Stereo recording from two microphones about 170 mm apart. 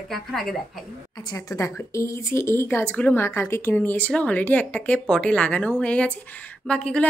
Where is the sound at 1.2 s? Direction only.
20° left (ahead or behind).